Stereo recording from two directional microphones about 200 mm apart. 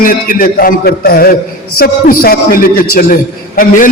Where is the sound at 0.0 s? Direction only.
45° left (ahead or behind).